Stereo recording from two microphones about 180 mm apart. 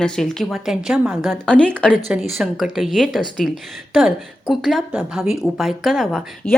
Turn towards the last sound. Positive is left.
turn(degrees=0)  # may be behind; listen again after turning